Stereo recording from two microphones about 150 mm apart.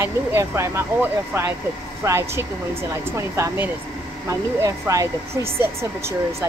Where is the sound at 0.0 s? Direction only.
15° right (ahead or behind).